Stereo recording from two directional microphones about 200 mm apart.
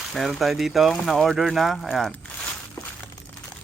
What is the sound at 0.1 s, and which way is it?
Speech, centre (ahead or behind).